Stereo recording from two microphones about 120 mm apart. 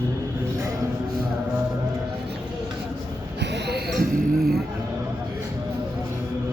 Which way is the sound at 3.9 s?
Centre (ahead or behind).